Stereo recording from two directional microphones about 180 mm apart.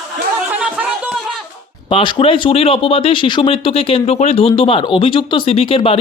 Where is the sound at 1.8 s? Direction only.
30° left (ahead or behind).